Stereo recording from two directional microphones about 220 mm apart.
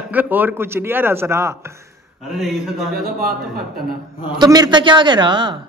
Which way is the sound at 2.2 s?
Centre (ahead or behind).